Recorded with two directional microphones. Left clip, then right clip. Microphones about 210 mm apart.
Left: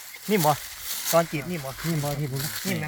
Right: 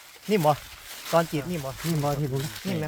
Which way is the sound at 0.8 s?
50° left (ahead or behind).